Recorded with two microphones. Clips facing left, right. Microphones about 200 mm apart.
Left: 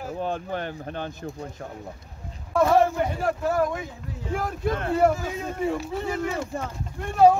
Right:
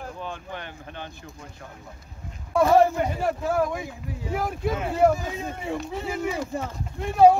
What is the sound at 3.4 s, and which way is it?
Speech, 5° right (ahead or behind).